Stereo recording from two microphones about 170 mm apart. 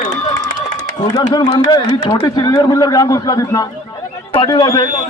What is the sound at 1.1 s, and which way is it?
Speech, 25° left (ahead or behind).